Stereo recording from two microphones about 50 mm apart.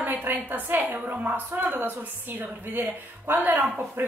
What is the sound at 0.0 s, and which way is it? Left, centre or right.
A woman's voice, right.